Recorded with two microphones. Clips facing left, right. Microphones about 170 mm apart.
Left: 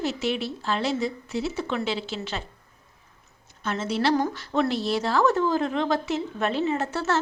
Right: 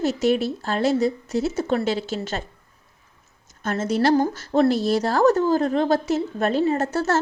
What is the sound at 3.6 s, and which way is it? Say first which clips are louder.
A woman's voice: right 4 dB; 45° right (ahead or behind).